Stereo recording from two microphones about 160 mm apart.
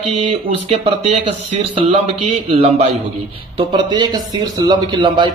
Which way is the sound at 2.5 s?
40° right (ahead or behind).